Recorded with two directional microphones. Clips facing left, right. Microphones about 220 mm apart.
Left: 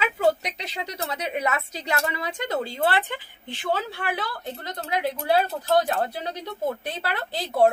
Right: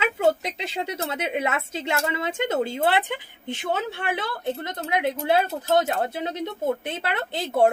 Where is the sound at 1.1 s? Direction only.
25° right (ahead or behind).